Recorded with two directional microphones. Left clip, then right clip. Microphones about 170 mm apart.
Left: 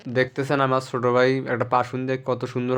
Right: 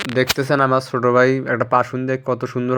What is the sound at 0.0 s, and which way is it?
Speech, 25° right (ahead or behind).